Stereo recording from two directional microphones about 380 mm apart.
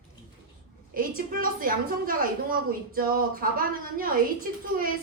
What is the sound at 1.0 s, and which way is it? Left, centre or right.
A woman's voice, right.